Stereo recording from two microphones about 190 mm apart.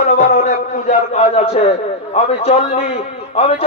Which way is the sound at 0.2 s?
45° left (ahead or behind).